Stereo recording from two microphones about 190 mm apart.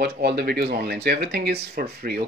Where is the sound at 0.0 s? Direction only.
55° right (ahead or behind).